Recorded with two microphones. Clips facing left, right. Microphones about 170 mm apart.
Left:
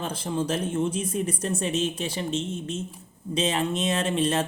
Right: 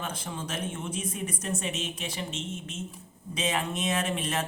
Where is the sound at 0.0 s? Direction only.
30° left (ahead or behind).